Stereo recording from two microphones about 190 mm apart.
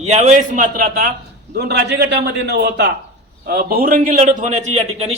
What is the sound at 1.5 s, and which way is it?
A man's voice, 60° right (ahead or behind).